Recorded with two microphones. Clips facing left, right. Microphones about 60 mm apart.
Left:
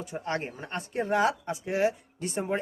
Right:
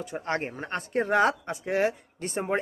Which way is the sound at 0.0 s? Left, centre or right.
Right.